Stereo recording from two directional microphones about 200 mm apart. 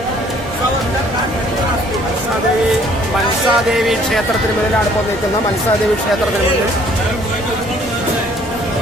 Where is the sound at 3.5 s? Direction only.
Centre (ahead or behind).